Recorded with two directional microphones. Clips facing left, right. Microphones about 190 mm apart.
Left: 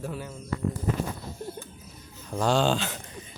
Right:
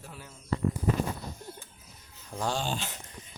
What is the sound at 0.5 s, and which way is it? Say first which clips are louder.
Speech: right 1 dB; 30° right (ahead or behind).